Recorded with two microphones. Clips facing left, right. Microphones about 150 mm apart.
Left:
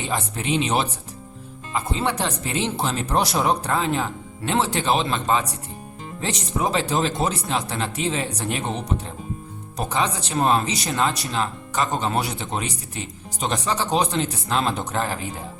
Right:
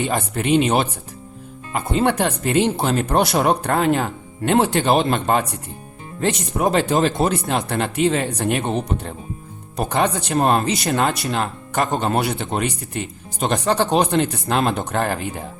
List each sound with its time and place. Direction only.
0.0 s speech: 55° right (ahead or behind)
9.7 s speech: 60° right (ahead or behind)